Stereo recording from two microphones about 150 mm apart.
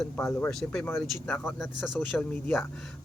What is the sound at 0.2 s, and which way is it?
Speech, 15° left (ahead or behind).